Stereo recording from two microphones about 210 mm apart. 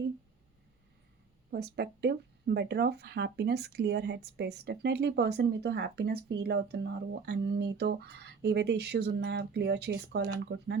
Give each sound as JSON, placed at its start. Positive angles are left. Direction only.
{"t": 1.5, "sound": "speech", "side_deg": -50}